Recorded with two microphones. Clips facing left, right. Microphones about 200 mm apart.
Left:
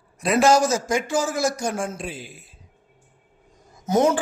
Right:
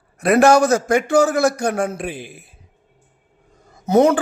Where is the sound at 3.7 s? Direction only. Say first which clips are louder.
Right 5 dB; 60° right (ahead or behind).